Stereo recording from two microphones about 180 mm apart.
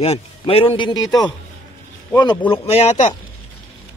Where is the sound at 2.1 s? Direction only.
25° left (ahead or behind).